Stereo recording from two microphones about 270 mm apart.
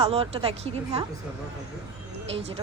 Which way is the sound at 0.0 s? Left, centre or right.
Right.